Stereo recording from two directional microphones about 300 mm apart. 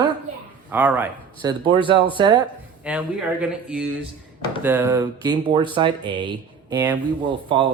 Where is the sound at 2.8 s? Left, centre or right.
Centre.